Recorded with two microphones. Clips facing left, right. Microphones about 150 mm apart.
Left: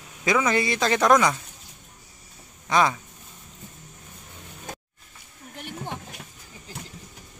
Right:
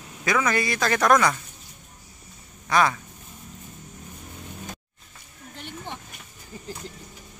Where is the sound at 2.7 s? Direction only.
20° left (ahead or behind).